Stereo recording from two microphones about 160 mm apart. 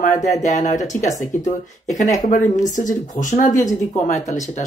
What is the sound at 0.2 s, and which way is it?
Speech, 50° left (ahead or behind).